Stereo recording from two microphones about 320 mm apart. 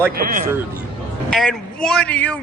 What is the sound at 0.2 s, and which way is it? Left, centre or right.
Speech, right.